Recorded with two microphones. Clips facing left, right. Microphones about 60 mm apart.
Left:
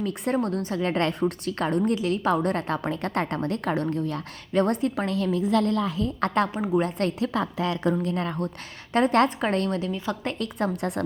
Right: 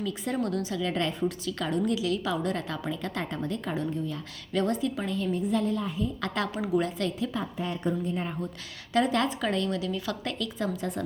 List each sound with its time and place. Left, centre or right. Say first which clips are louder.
0.0 s a woman's voice: left 4 dB; left
1.5 s a woman's voice: left 4 dB; left
4.5 s a woman's voice: left 4 dB; left
6.1 s a woman's voice: left 6 dB; left
7.0 s a woman's voice: left 5 dB; left
8.9 s a woman's voice: left 5 dB; left
9.9 s a woman's voice: left 3 dB; left
10.3 s a woman's voice: left 4 dB; left